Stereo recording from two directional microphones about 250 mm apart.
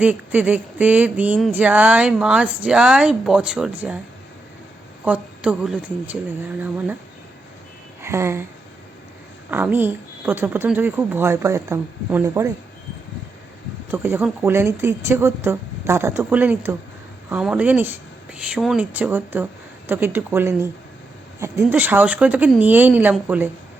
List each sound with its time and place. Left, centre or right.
0.0 s a woman's voice: centre
5.0 s a woman's voice: centre
8.0 s a sound: centre
9.5 s speech: centre
13.9 s speech: centre